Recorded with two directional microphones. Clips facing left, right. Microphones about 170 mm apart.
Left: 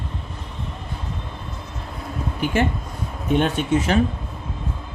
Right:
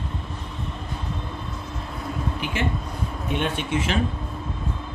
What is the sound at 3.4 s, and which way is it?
Speech, 40° left (ahead or behind).